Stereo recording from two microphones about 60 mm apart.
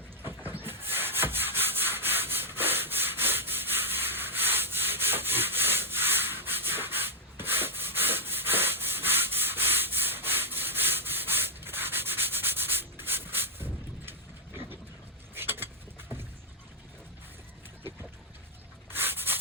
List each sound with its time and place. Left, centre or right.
0.2 s rub: right
15.4 s vehicle: right
18.9 s a sound: right